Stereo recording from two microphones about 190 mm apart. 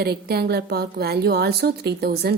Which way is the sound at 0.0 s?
55° right (ahead or behind).